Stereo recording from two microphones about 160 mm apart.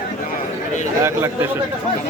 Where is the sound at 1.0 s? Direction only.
15° right (ahead or behind).